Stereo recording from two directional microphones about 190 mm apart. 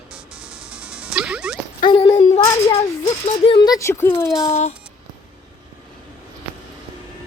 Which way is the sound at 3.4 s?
25° left (ahead or behind).